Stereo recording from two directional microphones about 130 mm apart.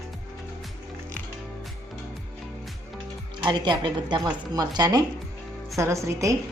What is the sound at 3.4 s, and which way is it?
A woman's voice, 35° right (ahead or behind).